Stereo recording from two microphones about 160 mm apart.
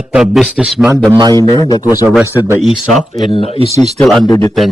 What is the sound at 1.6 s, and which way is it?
Speech, 25° left (ahead or behind).